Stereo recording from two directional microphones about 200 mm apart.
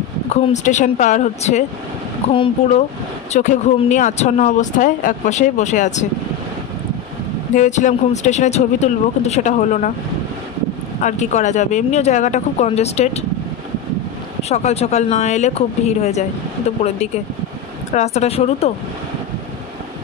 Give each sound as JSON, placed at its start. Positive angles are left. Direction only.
{"t": 0.3, "sound": "speech", "side_deg": 35}
{"t": 2.3, "sound": "speech", "side_deg": 25}
{"t": 3.3, "sound": "speech", "side_deg": 40}
{"t": 7.5, "sound": "speech", "side_deg": 40}
{"t": 11.0, "sound": "speech", "side_deg": 35}
{"t": 14.5, "sound": "speech", "side_deg": 35}